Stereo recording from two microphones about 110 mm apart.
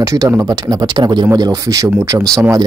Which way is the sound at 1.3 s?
30° right (ahead or behind).